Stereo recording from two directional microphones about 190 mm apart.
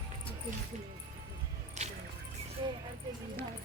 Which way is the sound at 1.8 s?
40° right (ahead or behind).